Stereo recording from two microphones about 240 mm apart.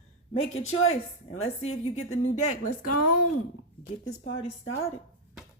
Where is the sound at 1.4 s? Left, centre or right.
Left.